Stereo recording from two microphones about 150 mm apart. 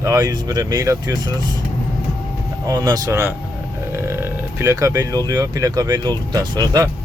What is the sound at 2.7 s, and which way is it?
Speech, 25° right (ahead or behind).